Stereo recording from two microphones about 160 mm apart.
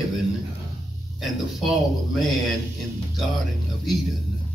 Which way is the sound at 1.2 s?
Centre (ahead or behind).